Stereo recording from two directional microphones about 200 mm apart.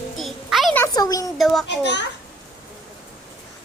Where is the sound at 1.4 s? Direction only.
Centre (ahead or behind).